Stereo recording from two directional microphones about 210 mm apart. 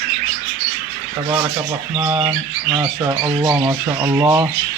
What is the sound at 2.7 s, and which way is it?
Speech, 15° right (ahead or behind).